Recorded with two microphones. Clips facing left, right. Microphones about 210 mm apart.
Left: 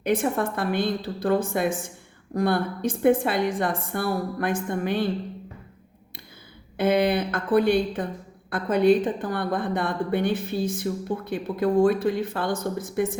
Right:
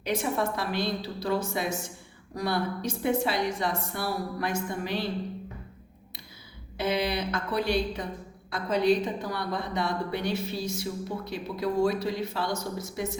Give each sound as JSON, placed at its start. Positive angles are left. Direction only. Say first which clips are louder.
{"t": 0.0, "sound": "a woman's voice", "louder": "left 5 dB", "side_deg": 55}
{"t": 6.7, "sound": "a woman's voice", "louder": "left 7 dB", "side_deg": 55}